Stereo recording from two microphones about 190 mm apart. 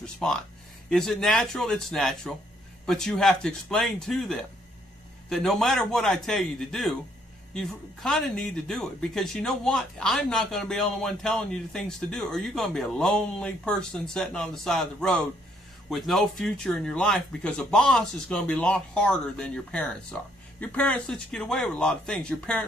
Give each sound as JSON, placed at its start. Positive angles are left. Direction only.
{"t": 0.0, "sound": "speech", "side_deg": 5}